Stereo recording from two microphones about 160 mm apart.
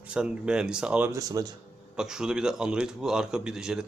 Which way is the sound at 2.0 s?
5° right (ahead or behind).